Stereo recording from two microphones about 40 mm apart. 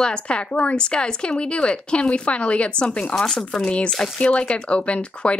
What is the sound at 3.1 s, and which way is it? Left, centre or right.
Speech, centre.